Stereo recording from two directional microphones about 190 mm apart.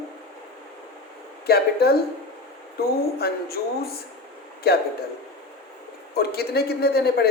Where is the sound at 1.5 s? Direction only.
55° left (ahead or behind).